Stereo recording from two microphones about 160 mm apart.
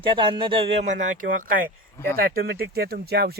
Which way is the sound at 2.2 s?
70° right (ahead or behind).